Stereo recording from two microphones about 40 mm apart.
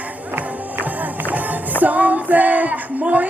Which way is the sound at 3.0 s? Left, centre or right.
Right.